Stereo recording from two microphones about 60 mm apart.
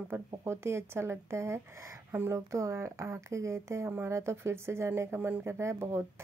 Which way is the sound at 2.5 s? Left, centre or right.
Right.